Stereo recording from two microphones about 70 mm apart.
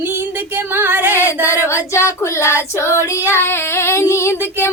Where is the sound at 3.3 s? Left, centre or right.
Left.